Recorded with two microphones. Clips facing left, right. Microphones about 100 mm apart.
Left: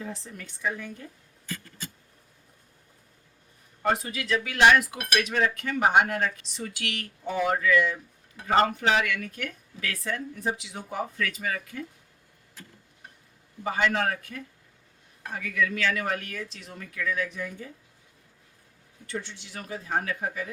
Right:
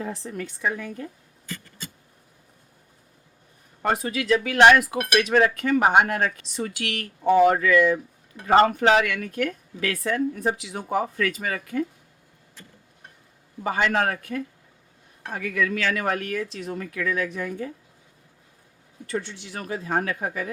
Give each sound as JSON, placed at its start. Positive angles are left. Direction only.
{"t": 0.0, "sound": "speech", "side_deg": -60}
{"t": 0.6, "sound": "speech", "side_deg": -75}
{"t": 4.0, "sound": "speech", "side_deg": -65}
{"t": 5.3, "sound": "speech", "side_deg": -80}
{"t": 13.7, "sound": "speech", "side_deg": -65}
{"t": 19.1, "sound": "speech", "side_deg": -65}